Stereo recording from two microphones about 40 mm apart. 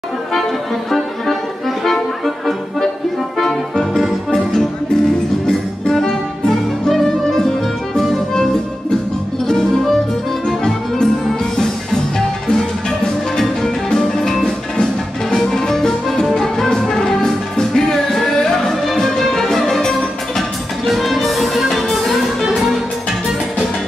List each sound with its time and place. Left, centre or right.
2.2 s music: centre
9.5 s music: centre
13.8 s music: centre